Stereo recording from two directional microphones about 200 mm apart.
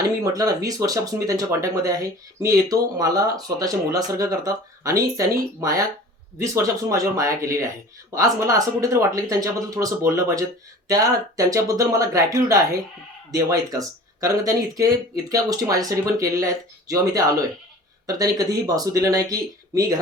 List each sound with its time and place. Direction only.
0.3 s speech: 15° right (ahead or behind)
18.0 s speech: 20° right (ahead or behind)